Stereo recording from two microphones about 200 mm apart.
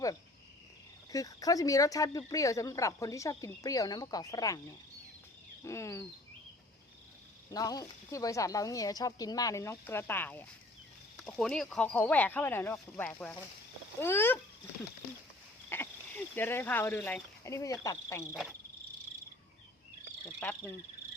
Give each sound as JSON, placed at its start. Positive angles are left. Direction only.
{"t": 1.1, "sound": "speech", "side_deg": 15}
{"t": 5.6, "sound": "speech", "side_deg": 15}
{"t": 7.5, "sound": "speech", "side_deg": 20}
{"t": 15.7, "sound": "speech", "side_deg": 10}
{"t": 20.4, "sound": "speech", "side_deg": 5}